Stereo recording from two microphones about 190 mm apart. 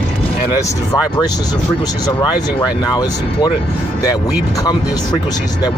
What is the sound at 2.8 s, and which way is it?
Speech, 20° left (ahead or behind).